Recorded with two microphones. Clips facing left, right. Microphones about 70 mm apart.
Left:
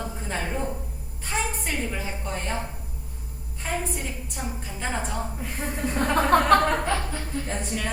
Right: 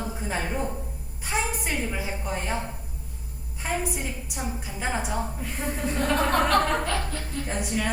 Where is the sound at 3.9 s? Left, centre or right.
Centre.